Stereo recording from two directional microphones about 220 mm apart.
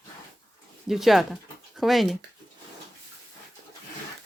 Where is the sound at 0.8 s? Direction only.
Centre (ahead or behind).